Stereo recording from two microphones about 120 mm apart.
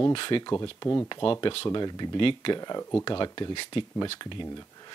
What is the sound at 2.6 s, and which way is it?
Speech, 30° left (ahead or behind).